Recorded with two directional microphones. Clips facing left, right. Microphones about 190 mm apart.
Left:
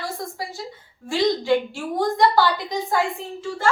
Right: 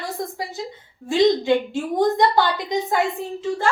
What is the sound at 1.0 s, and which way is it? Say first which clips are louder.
A woman's voice: right 3 dB; 20° right (ahead or behind).